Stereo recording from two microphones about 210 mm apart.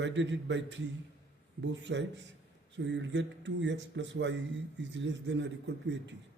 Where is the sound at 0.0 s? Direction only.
60° right (ahead or behind).